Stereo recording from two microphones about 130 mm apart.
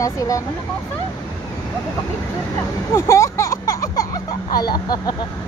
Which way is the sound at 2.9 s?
20° left (ahead or behind).